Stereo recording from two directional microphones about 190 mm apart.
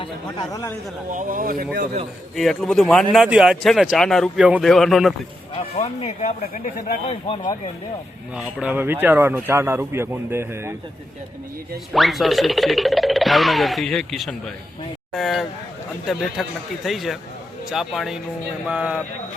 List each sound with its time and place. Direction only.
0.0 s speech: 20° left (ahead or behind)
1.1 s speech: 45° right (ahead or behind)
2.3 s speech: centre (ahead or behind)
5.5 s speech: 30° left (ahead or behind)
8.4 s speech: 5° right (ahead or behind)
11.9 s speech: centre (ahead or behind)